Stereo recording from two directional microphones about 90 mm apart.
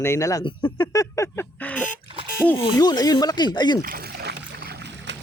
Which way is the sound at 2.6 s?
50° left (ahead or behind).